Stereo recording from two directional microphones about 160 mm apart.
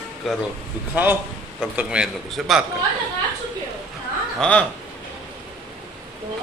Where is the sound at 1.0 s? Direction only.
10° right (ahead or behind).